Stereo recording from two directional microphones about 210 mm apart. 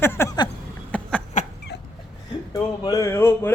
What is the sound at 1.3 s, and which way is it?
Dog, 35° left (ahead or behind).